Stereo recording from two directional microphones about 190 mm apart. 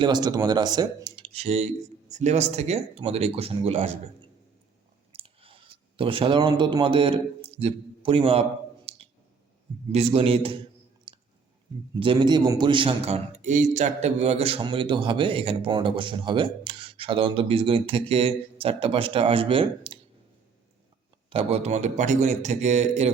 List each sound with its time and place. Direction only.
0.0 s speech: 20° right (ahead or behind)
5.1 s speech: 30° right (ahead or behind)
8.9 s clicking: 30° right (ahead or behind)
9.9 s a man's voice: 30° right (ahead or behind)
11.1 s clicking: 25° right (ahead or behind)
11.9 s a man's voice: 25° right (ahead or behind)
21.2 s speech: 30° right (ahead or behind)